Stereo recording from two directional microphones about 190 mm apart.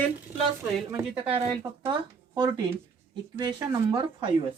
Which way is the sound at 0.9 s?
15° right (ahead or behind).